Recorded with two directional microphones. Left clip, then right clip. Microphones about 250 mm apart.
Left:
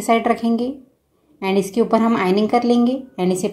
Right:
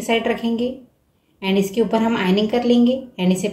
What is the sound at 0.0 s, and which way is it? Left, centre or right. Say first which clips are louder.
A woman's voice: left 3 dB; left.